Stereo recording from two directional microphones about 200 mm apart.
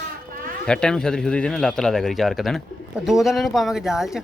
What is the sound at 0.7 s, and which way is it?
Speech, 5° left (ahead or behind).